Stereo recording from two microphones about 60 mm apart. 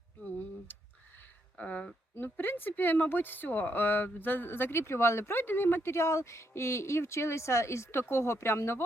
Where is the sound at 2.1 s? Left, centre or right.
Left.